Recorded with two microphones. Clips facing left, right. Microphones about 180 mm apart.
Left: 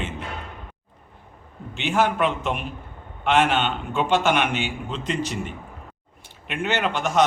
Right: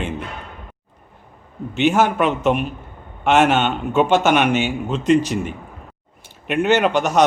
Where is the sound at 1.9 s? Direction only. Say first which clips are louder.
Right 4 dB; 45° right (ahead or behind).